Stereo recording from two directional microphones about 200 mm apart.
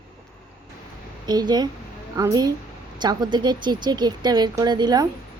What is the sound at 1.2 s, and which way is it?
Speech, 20° right (ahead or behind).